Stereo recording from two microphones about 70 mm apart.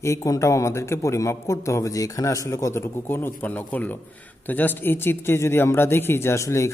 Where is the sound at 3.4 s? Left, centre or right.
Left.